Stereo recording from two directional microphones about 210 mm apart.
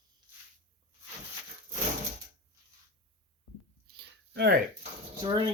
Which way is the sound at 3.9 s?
55° right (ahead or behind).